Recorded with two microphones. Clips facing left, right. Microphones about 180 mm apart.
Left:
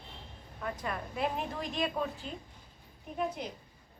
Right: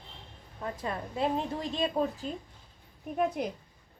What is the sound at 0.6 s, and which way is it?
A woman's voice, 25° right (ahead or behind).